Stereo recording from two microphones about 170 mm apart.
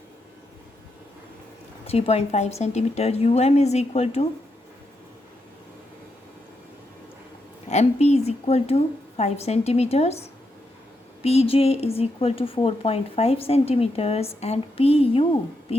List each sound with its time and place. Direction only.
1.9 s speech: 35° left (ahead or behind)
7.7 s speech: 40° left (ahead or behind)
11.2 s speech: 35° left (ahead or behind)